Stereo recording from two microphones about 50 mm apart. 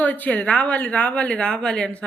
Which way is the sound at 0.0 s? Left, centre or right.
Left.